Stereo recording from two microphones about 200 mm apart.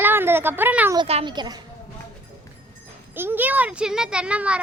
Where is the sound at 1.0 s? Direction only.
25° right (ahead or behind).